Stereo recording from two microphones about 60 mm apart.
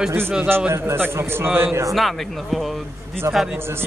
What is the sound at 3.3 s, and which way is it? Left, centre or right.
Music, right.